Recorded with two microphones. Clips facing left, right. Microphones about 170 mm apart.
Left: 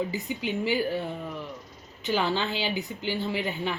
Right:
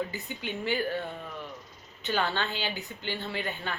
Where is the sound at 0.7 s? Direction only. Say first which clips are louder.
Left 1 dB; 10° left (ahead or behind).